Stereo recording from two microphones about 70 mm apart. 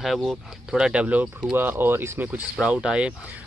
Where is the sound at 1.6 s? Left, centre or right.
Right.